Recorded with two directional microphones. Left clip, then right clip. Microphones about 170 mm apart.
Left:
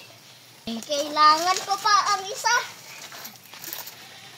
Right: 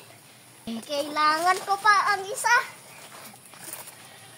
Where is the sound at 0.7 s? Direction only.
20° right (ahead or behind).